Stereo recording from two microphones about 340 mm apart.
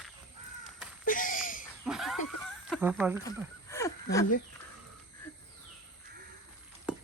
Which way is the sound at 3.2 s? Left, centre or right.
Centre.